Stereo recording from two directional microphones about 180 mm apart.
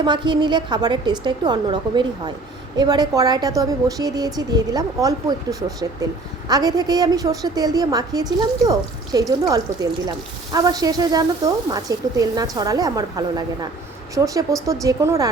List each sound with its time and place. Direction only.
0.0 s speech: 25° right (ahead or behind)
14.7 s a woman's voice: 20° right (ahead or behind)